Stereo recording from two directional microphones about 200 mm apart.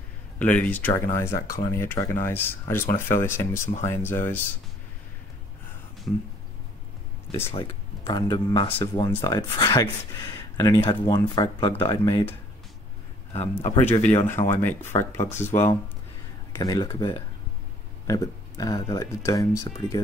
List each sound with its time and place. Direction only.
0.4 s speech: 10° left (ahead or behind)
7.5 s speech: 20° left (ahead or behind)
13.3 s speech: 35° left (ahead or behind)
14.0 s speech: 10° left (ahead or behind)